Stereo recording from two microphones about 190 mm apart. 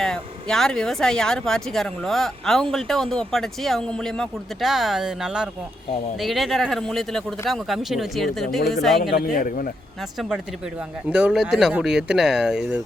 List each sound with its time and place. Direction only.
0.0 s speech: 5° left (ahead or behind)
9.1 s a man's voice: 45° left (ahead or behind)
10.2 s speech: centre (ahead or behind)